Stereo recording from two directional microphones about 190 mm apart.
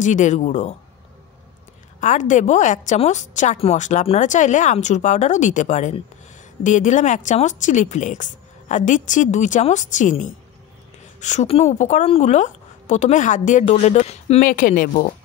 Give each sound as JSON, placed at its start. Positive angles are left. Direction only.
{"t": 0.0, "sound": "a woman's voice", "side_deg": 40}
{"t": 2.0, "sound": "a woman's voice", "side_deg": 40}